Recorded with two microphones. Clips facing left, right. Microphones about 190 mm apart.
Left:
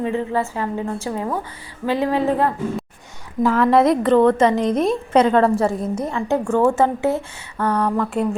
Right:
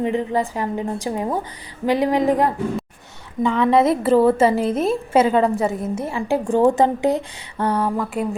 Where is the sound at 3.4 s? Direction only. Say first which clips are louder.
Left 1 dB; centre (ahead or behind).